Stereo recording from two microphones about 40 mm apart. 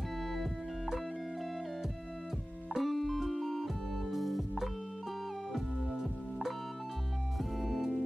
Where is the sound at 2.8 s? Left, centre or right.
Centre.